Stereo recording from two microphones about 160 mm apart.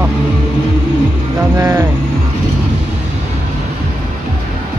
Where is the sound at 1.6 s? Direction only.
15° right (ahead or behind).